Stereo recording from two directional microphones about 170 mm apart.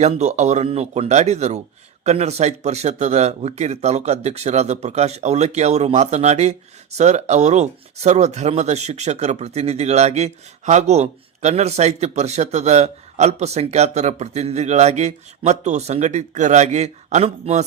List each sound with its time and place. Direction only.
0.0 s speech: 40° right (ahead or behind)